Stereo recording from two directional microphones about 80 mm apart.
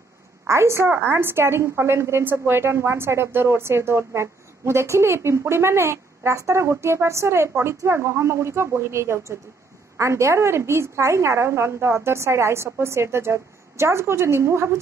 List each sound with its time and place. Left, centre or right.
0.5 s a woman's voice: right